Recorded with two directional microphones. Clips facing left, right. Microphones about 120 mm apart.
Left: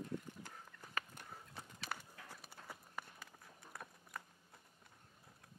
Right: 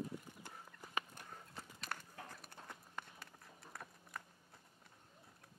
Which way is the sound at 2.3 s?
5° left (ahead or behind).